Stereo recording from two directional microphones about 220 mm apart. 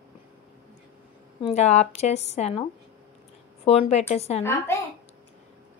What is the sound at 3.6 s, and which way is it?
Speech, 30° left (ahead or behind).